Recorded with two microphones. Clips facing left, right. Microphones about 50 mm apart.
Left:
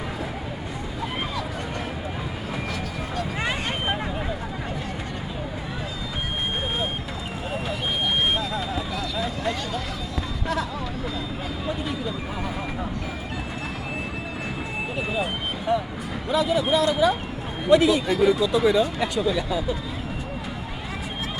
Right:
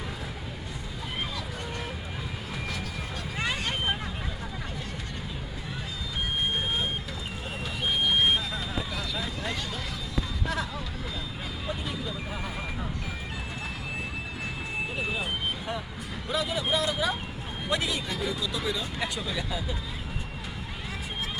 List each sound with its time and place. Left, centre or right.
3.4 s vehicle: left
8.2 s vehicle: centre
9.1 s a sound: centre
11.6 s vehicle: centre
14.9 s vehicle: centre
16.3 s a sound: centre
18.5 s speech: centre
18.9 s speech: centre